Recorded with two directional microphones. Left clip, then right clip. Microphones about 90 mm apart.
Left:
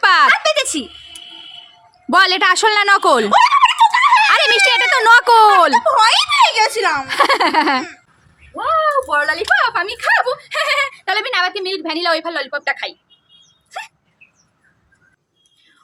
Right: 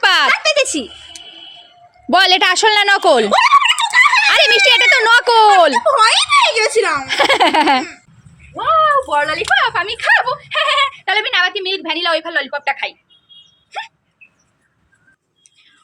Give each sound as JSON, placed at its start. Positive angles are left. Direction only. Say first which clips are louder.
{"t": 0.0, "sound": "a sound", "louder": "left 1 dB", "side_deg": 0}
{"t": 0.3, "sound": "a sound", "louder": "even", "side_deg": 60}
{"t": 2.0, "sound": "speech", "louder": "right 1 dB", "side_deg": 5}
{"t": 3.3, "sound": "dog", "louder": "even", "side_deg": 35}
{"t": 3.6, "sound": "a sound", "louder": "left 1 dB", "side_deg": 20}
{"t": 4.7, "sound": "speech", "louder": "right 1 dB", "side_deg": 0}
{"t": 5.8, "sound": "speech", "louder": "right 1 dB", "side_deg": 40}
{"t": 7.1, "sound": "speech", "louder": "right 2 dB", "side_deg": -5}
{"t": 8.5, "sound": "speech", "louder": "right 3 dB", "side_deg": 10}
{"t": 13.7, "sound": "hiccup", "louder": "right 3 dB", "side_deg": 25}